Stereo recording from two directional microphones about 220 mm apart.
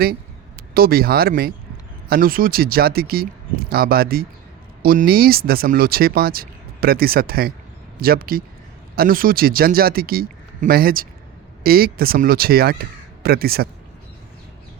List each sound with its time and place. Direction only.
0.7 s speech: 45° right (ahead or behind)